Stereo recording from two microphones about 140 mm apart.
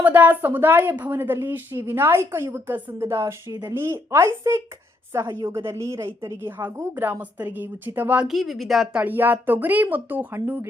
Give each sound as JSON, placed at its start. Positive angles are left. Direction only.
{"t": 0.0, "sound": "a woman's voice", "side_deg": -10}